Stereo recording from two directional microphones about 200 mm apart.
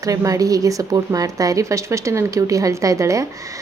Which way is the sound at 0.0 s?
15° right (ahead or behind).